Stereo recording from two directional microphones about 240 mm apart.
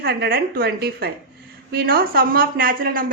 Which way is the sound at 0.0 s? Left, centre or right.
Right.